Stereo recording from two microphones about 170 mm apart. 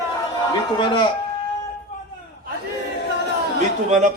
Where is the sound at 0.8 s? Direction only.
30° left (ahead or behind).